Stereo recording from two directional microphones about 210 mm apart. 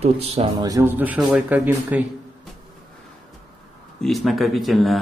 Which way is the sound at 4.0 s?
Centre (ahead or behind).